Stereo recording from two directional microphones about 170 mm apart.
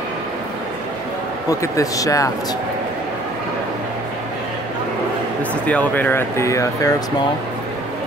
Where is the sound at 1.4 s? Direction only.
20° left (ahead or behind).